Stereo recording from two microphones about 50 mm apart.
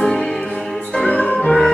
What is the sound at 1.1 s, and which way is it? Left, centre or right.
Music, left.